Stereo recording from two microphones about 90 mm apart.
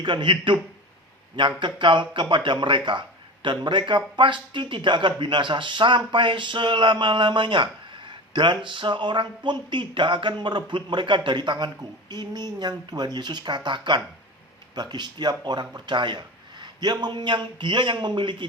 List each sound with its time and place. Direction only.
0.0 s a man's voice: 60° right (ahead or behind)